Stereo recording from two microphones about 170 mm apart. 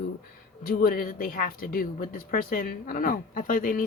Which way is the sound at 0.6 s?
60° left (ahead or behind).